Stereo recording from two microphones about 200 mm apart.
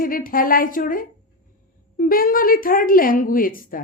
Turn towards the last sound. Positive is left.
turn(degrees=45)  # may be behind; listen again after turning